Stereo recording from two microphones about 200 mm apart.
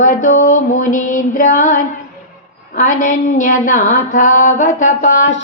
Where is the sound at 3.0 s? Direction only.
40° left (ahead or behind).